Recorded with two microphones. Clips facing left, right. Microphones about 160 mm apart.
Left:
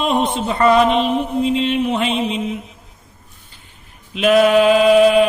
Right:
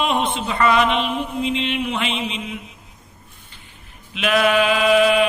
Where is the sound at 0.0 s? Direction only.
40° left (ahead or behind).